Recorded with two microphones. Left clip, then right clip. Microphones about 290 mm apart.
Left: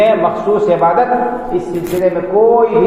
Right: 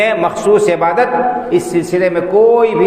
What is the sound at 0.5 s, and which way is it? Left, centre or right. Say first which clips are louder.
Speech: even; right.